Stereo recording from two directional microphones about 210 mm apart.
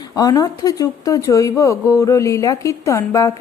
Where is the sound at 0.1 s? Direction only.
15° left (ahead or behind).